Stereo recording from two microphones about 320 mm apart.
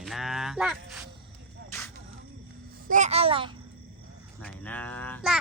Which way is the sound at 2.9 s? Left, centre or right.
Right.